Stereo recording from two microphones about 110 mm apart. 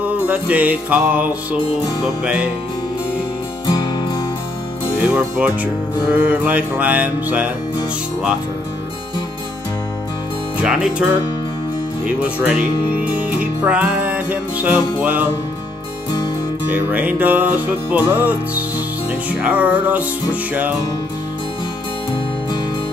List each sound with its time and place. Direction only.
0.0 s music: 15° right (ahead or behind)
3.6 s music: 40° left (ahead or behind)
5.0 s music: 15° right (ahead or behind)
10.6 s music: 10° right (ahead or behind)
12.2 s music: 10° right (ahead or behind)
16.6 s music: 15° right (ahead or behind)